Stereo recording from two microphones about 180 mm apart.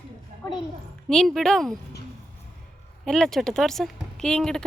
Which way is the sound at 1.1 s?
Centre (ahead or behind).